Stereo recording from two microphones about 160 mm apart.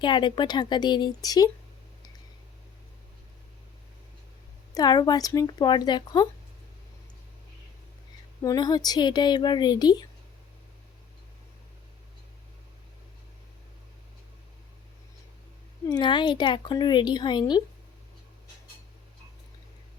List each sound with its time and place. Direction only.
0.0 s a woman's voice: 30° left (ahead or behind)
4.7 s a woman's voice: 25° left (ahead or behind)
8.4 s a woman's voice: 25° left (ahead or behind)
15.9 s a woman's voice: 30° left (ahead or behind)